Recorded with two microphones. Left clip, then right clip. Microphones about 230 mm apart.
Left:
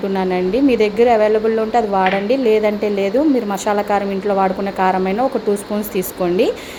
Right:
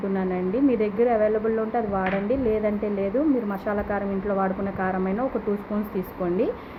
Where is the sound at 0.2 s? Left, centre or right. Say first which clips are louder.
Left 9 dB; left.